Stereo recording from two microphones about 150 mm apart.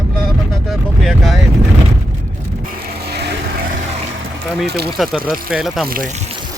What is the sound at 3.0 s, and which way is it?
Vehicle, 90° right.